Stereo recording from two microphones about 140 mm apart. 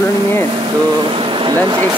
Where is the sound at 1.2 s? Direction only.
35° right (ahead or behind).